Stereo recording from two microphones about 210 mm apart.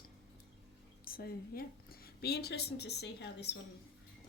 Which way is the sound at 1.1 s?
45° left (ahead or behind).